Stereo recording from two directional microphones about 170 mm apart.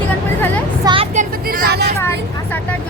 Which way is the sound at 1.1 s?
50° right (ahead or behind).